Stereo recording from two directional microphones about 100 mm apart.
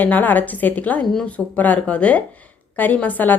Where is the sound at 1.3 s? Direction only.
15° left (ahead or behind).